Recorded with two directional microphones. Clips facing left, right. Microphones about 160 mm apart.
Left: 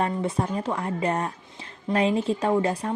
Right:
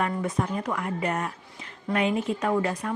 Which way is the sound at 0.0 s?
30° left (ahead or behind).